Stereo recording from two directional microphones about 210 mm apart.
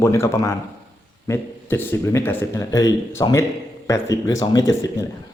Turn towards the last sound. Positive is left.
turn(degrees=15)  # may be behind; listen again after turning